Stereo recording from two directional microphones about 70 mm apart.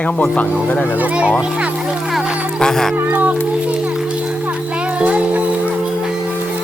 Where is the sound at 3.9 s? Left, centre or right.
Centre.